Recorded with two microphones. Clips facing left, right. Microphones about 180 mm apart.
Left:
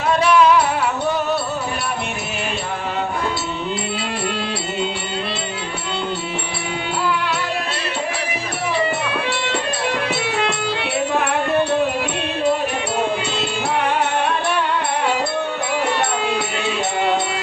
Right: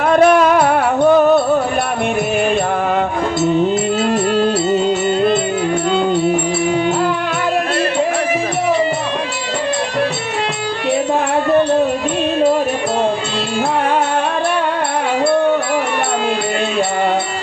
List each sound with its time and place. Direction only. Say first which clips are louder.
0.0 s music: right 5 dB; 50° right (ahead or behind)